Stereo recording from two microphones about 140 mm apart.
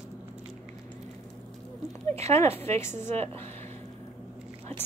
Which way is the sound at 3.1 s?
50° right (ahead or behind).